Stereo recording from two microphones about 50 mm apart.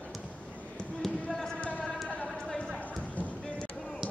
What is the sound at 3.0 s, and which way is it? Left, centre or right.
Clip-clop, left.